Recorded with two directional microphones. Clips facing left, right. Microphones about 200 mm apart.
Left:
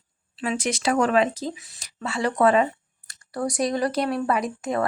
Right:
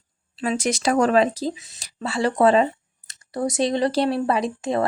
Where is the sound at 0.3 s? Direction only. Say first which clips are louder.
Right 3 dB; 40° right (ahead or behind).